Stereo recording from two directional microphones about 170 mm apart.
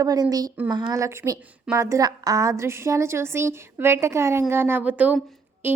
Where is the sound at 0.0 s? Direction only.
20° right (ahead or behind).